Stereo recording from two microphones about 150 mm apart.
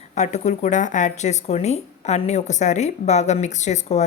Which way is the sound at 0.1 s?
50° left (ahead or behind).